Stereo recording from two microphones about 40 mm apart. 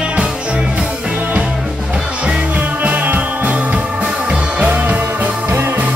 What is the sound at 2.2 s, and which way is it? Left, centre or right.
Music, right.